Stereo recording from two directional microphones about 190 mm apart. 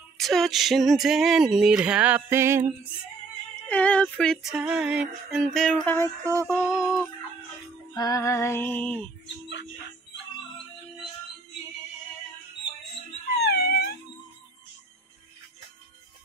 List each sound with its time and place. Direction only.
0.2 s speech: centre (ahead or behind)
3.6 s speech: 5° left (ahead or behind)
6.5 s music: 15° left (ahead or behind)
13.4 s dog: 55° left (ahead or behind)